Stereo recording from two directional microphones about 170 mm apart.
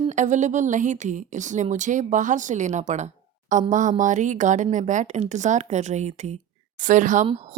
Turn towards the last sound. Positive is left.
turn(degrees=-45)  # may be behind; listen again after turning